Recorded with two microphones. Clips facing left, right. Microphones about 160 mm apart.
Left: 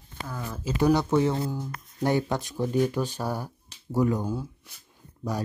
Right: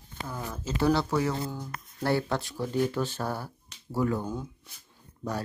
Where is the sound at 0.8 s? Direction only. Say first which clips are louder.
Left 4 dB; 15° left (ahead or behind).